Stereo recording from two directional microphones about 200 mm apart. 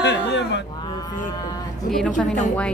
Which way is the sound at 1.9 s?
5° left (ahead or behind).